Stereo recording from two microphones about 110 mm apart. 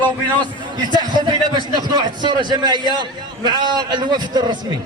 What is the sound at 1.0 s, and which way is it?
A man's voice, 40° right (ahead or behind).